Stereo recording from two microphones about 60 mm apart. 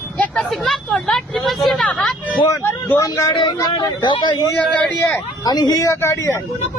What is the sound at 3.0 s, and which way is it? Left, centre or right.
Speech, left.